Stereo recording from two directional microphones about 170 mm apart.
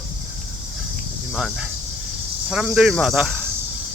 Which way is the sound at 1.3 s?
5° right (ahead or behind).